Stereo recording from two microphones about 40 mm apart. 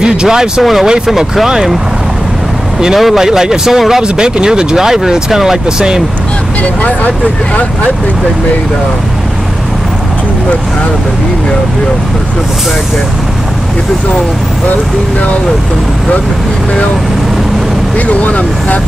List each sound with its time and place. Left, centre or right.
0.0 s speech: centre
3.0 s speech: centre
6.6 s speech: left
17.9 s speech: left